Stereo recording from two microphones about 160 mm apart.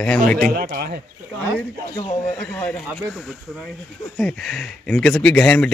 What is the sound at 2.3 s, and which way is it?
Speech, 10° left (ahead or behind).